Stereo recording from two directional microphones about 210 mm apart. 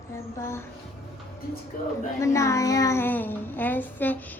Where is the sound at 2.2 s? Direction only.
15° left (ahead or behind).